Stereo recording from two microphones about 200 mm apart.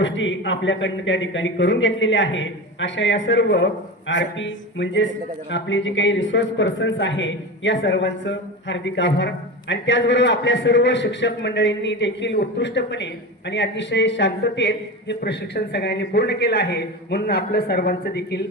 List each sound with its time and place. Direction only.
0.0 s speech: 70° left (ahead or behind)